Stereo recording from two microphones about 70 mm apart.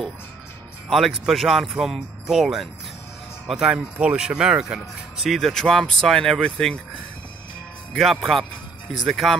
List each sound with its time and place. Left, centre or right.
0.8 s speech: centre
3.7 s speech: centre
7.9 s speech: centre